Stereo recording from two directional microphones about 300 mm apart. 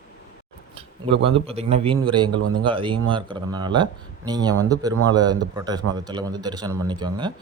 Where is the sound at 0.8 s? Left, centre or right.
Centre.